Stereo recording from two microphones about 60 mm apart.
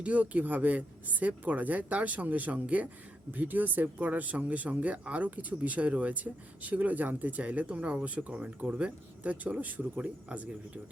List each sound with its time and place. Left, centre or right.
0.0 s speech: right